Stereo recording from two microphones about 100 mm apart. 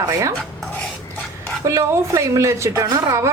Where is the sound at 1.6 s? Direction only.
30° right (ahead or behind).